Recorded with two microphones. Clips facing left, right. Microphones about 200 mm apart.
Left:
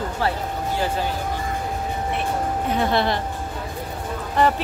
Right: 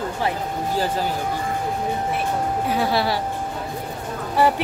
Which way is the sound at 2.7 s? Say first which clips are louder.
Left 1 dB; 5° right (ahead or behind).